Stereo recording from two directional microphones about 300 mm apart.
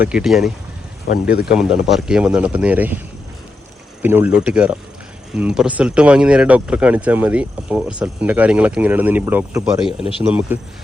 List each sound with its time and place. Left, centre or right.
0.0 s speech: centre
1.3 s speech: left
1.5 s speech: centre
4.0 s speech: centre